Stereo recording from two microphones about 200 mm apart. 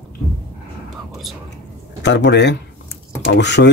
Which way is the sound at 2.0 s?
60° left (ahead or behind).